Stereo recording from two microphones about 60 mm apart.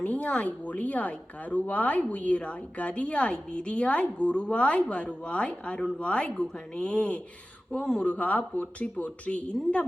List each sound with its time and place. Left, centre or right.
0.0 s a woman's voice: left